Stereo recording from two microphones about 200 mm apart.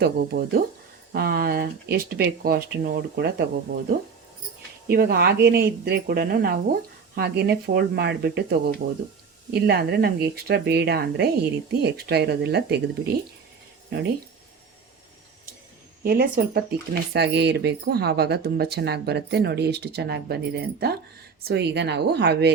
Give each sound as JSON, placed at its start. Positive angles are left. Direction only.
{"t": 0.0, "sound": "speech", "side_deg": -50}
{"t": 4.9, "sound": "speech", "side_deg": -50}
{"t": 16.0, "sound": "speech", "side_deg": -50}